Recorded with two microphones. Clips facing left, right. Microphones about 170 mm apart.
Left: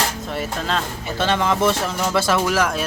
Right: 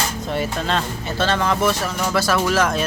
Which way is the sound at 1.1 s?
15° left (ahead or behind).